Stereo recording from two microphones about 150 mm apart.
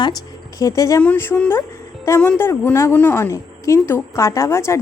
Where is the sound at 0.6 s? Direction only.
20° left (ahead or behind).